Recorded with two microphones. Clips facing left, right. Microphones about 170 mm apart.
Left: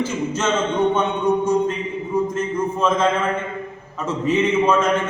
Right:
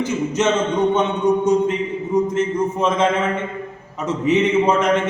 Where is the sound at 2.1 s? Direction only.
20° right (ahead or behind).